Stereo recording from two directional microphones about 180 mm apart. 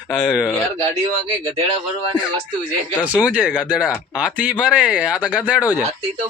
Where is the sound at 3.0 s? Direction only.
10° right (ahead or behind).